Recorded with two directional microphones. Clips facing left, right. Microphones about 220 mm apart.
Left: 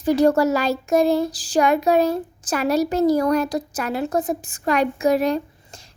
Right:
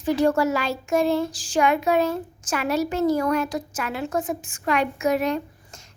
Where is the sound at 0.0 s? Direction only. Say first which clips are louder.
Left 4 dB; 40° left (ahead or behind).